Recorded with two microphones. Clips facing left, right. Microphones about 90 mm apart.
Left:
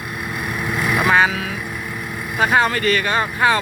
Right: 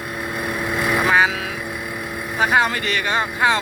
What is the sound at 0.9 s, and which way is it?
Vehicle, 10° right (ahead or behind).